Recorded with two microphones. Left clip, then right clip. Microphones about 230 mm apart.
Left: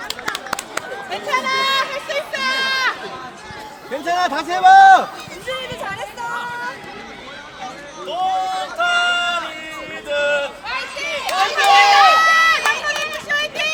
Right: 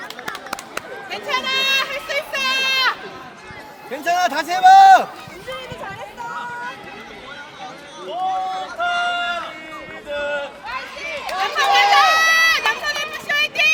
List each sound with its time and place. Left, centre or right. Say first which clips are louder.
1.1 s a sound: left 2 dB; right
3.9 s a man's voice: even; right
5.5 s music: left 5 dB; left
8.0 s run: left 2 dB; left
12.2 s run: left 1 dB; right
13.2 s vehicle: right 4 dB; right